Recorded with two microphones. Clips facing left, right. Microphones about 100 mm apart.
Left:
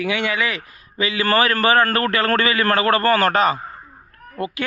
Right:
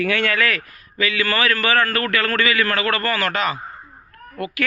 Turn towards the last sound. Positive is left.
turn(degrees=30)  # may be behind; listen again after turning